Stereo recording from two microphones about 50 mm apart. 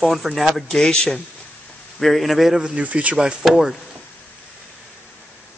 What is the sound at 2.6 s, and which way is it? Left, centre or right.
Speech, centre.